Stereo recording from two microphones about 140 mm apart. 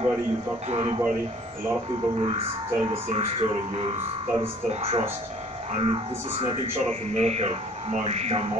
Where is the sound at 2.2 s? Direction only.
45° right (ahead or behind).